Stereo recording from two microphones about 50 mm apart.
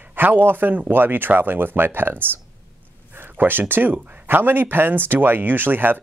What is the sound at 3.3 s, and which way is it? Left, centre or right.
Speech, right.